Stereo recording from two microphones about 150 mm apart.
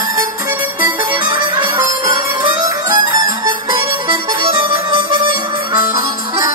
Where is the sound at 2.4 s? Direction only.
25° right (ahead or behind).